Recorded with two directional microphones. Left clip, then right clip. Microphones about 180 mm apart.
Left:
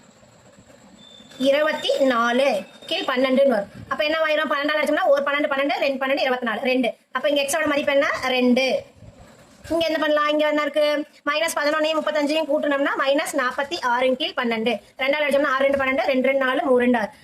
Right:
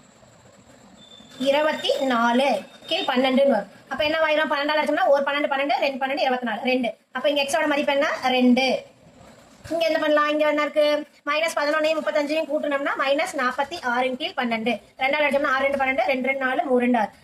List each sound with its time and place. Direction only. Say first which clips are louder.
1.5 s a woman's voice: left 1 dB; 40° left (ahead or behind)
9.7 s a woman's voice: even; 40° left (ahead or behind)